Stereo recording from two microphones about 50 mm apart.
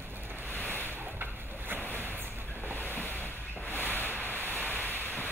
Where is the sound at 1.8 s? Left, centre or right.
Left.